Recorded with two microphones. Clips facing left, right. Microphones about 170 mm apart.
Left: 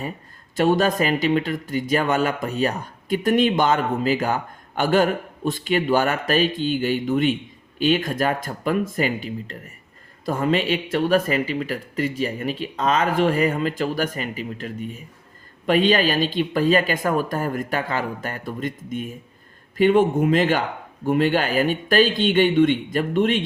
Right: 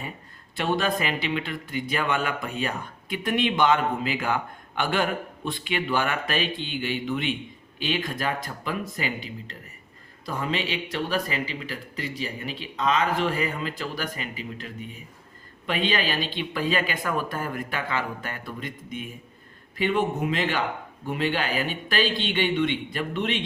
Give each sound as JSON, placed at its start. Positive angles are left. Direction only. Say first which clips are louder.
{"t": 0.5, "sound": "speech", "louder": "left 7 dB", "side_deg": 45}